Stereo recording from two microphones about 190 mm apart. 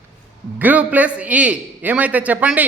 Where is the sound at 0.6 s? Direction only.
10° right (ahead or behind).